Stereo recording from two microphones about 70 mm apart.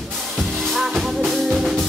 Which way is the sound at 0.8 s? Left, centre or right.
Centre.